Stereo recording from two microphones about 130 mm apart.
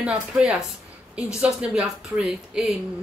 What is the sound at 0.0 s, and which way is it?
Speech, 10° right (ahead or behind).